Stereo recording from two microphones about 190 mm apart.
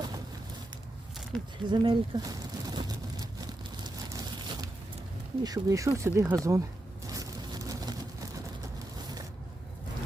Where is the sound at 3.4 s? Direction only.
20° right (ahead or behind).